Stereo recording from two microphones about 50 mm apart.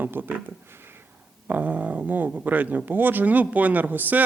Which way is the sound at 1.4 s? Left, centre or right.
Right.